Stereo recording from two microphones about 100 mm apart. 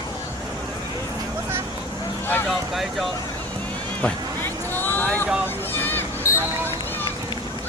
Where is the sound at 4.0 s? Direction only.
20° left (ahead or behind).